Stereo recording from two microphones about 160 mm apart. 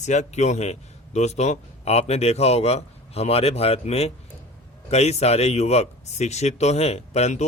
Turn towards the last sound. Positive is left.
turn(degrees=45)  # may be behind; listen again after turning